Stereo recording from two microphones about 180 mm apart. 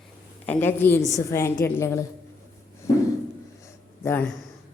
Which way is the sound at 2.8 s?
15° left (ahead or behind).